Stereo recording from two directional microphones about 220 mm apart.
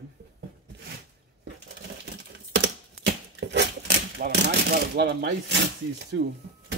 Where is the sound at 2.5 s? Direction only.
50° right (ahead or behind).